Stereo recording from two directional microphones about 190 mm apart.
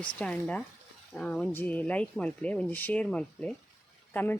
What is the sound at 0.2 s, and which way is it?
Speech, 5° left (ahead or behind).